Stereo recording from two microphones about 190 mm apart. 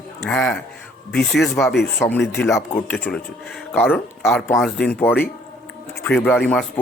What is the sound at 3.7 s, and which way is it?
Speech, 10° left (ahead or behind).